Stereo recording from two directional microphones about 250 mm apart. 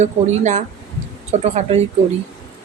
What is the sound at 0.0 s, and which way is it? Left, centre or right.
Speech, right.